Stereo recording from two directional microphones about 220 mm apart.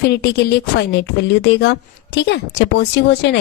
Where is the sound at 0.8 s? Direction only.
50° left (ahead or behind).